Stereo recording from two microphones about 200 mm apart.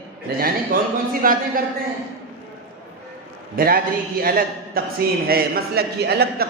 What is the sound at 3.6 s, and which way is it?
A man's voice, 45° right (ahead or behind).